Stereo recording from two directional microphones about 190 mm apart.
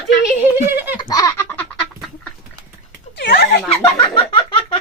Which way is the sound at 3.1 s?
55° left (ahead or behind).